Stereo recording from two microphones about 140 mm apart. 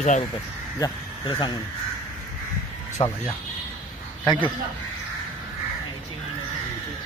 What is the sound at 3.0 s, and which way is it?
Speech, 45° left (ahead or behind).